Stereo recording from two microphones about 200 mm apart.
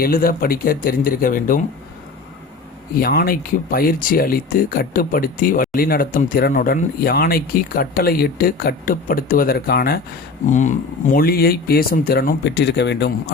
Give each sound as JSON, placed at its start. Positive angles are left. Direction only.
{"t": 0.0, "sound": "speech", "side_deg": 45}
{"t": 3.0, "sound": "speech", "side_deg": 45}
{"t": 10.4, "sound": "speech", "side_deg": 40}